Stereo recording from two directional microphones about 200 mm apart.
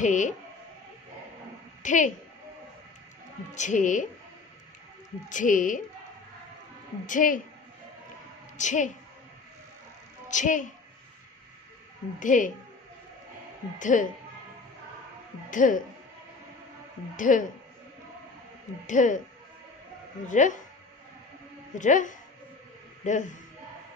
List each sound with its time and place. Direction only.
0.0 s speech: 40° left (ahead or behind)
1.8 s speech: 40° left (ahead or behind)
3.5 s speech: 40° left (ahead or behind)
5.3 s speech: 40° left (ahead or behind)
7.1 s speech: 40° left (ahead or behind)
8.5 s speech: 40° left (ahead or behind)
10.2 s a woman's voice: 40° left (ahead or behind)
12.2 s speech: 40° left (ahead or behind)
13.7 s speech: 40° left (ahead or behind)
15.5 s speech: 40° left (ahead or behind)
17.2 s speech: 40° left (ahead or behind)
18.9 s speech: 40° left (ahead or behind)
20.2 s speech: 40° left (ahead or behind)
21.7 s speech: 40° left (ahead or behind)